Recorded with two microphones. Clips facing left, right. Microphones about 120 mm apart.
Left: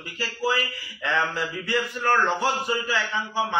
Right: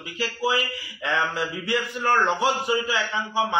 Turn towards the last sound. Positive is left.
turn(degrees=-20)  # may be behind; listen again after turning